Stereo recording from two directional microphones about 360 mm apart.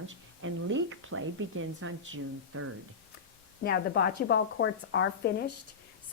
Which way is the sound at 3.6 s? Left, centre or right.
Left.